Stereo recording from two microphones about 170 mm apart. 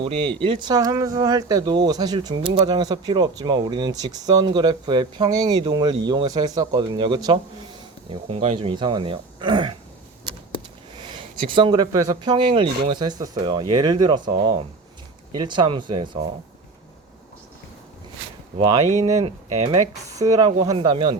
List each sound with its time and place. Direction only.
0.0 s speech: 30° right (ahead or behind)
11.1 s speech: 30° right (ahead or behind)
18.6 s speech: 25° right (ahead or behind)